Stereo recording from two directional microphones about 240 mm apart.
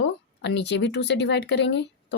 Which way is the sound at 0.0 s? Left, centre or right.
Left.